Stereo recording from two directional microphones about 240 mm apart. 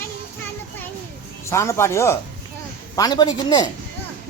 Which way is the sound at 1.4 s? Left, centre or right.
Centre.